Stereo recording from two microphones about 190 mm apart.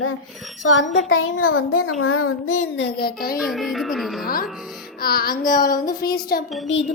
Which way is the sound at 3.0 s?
50° left (ahead or behind).